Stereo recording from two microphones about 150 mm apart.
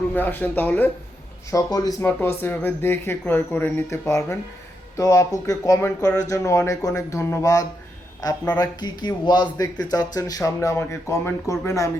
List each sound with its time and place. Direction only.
0.1 s speech: 10° left (ahead or behind)
1.5 s speech: 25° left (ahead or behind)